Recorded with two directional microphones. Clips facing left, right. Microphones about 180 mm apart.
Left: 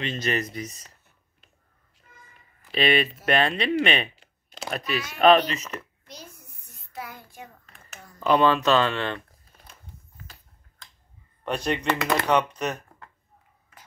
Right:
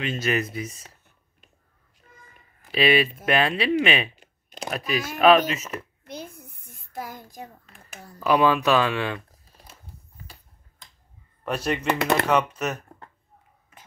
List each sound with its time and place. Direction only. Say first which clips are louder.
0.0 s speech: right 2 dB; 5° right (ahead or behind)
2.7 s speech: right 2 dB; 5° right (ahead or behind)
4.2 s a sound: right 3 dB; 15° right (ahead or behind)
4.6 s speech: right 1 dB; 5° right (ahead or behind)
4.9 s speech: right 5 dB; 45° right (ahead or behind)
5.5 s speech: right 2 dB; 5° right (ahead or behind)
6.0 s a sound: right 8 dB; 55° right (ahead or behind); by 7.4 s 40° right (ahead or behind)
8.2 s speech: even; 10° right (ahead or behind)
11.4 s speech: right 1 dB; 5° right (ahead or behind)